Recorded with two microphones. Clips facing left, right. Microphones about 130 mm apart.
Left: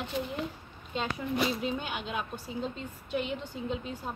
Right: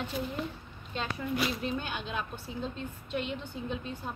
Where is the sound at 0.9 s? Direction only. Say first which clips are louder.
Left 2 dB; 20° left (ahead or behind); by 3.3 s 5° left (ahead or behind).